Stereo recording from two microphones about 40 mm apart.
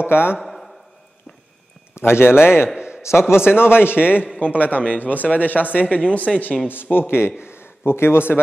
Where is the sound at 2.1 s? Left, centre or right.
Left.